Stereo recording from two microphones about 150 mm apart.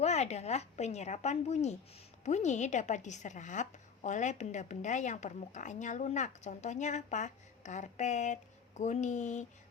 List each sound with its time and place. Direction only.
0.0 s a woman's voice: 45° left (ahead or behind)